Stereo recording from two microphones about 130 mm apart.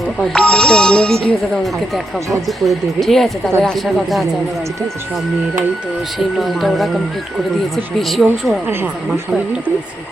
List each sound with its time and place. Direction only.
0.2 s speech: 5° left (ahead or behind)
6.1 s speech: centre (ahead or behind)
7.9 s speech: centre (ahead or behind)
8.6 s speech: 15° right (ahead or behind)